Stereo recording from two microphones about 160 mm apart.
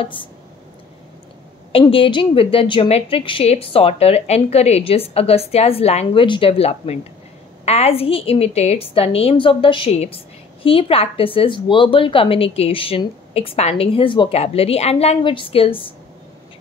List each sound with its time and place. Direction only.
0.0 s a woman's voice: 30° left (ahead or behind)
1.7 s a woman's voice: 35° left (ahead or behind)